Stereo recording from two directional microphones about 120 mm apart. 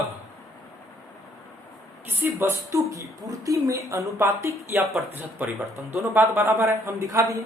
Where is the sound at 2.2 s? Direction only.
20° right (ahead or behind).